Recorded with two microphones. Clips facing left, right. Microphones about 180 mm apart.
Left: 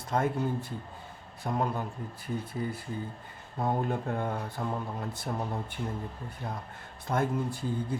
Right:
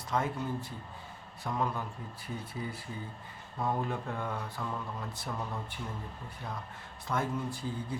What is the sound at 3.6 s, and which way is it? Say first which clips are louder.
Speech: left 3 dB; 30° left (ahead or behind).